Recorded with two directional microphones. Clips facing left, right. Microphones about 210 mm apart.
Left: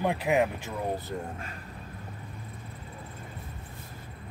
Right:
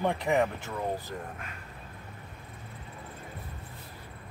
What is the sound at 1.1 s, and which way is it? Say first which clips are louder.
Speech: left 4 dB; 25° left (ahead or behind).